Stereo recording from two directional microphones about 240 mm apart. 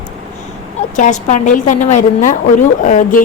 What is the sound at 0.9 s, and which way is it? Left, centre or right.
A woman's voice, left.